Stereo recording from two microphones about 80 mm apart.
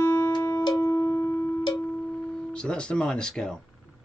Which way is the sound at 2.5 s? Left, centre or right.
Centre.